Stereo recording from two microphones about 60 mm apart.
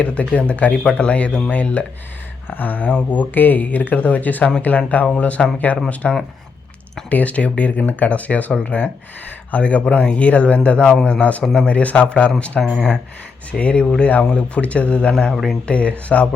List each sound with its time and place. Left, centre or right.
0.0 s a man's voice: left
2.5 s a man's voice: left
11.4 s speech: centre
11.7 s a man's voice: left
12.5 s speech: centre
13.5 s a man's voice: left